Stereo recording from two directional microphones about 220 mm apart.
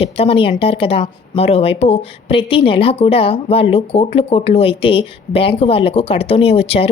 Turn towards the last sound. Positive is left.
turn(degrees=25)  # may be behind; listen again after turning